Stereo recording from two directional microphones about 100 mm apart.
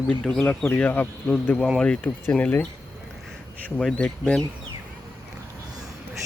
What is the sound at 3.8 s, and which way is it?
Speech, 5° left (ahead or behind).